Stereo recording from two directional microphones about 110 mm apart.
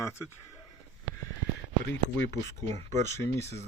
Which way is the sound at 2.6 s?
90° right.